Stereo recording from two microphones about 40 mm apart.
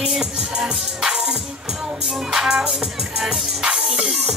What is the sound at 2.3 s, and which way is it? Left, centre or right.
Music, centre.